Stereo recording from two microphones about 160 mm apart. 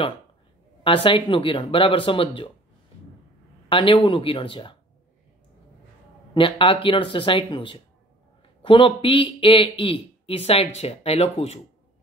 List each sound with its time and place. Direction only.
0.8 s speech: 35° left (ahead or behind)
3.6 s speech: 30° left (ahead or behind)
6.3 s speech: 30° left (ahead or behind)